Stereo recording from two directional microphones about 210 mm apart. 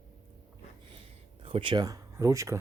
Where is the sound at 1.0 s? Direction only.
25° right (ahead or behind).